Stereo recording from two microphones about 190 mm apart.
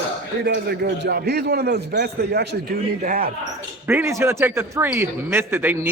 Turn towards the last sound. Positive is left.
turn(degrees=-10)  # may be behind; listen again after turning